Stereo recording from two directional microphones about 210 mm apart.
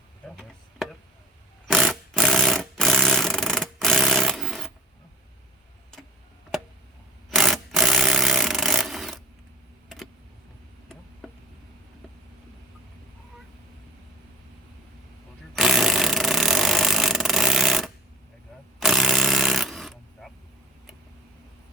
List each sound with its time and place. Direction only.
1.6 s jackhammer: centre (ahead or behind)
7.3 s tools: centre (ahead or behind)
15.5 s a sound: centre (ahead or behind)